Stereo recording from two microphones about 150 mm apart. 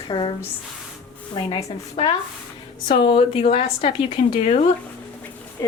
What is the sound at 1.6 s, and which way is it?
A woman's voice, 40° left (ahead or behind).